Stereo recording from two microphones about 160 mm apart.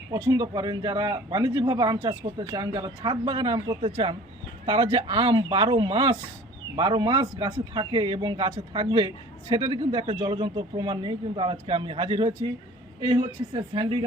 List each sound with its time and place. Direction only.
0.1 s a man's voice: 25° right (ahead or behind)